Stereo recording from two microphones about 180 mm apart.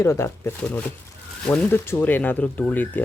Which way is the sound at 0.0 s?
15° left (ahead or behind).